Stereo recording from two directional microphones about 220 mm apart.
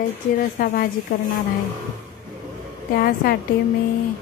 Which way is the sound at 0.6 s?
40° left (ahead or behind).